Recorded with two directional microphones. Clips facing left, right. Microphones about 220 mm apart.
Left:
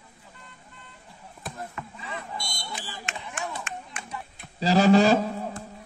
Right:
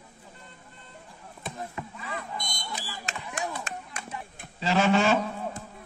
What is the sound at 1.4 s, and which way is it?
Chop, centre (ahead or behind).